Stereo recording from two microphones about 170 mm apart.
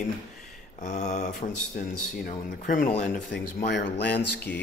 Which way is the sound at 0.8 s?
45° left (ahead or behind).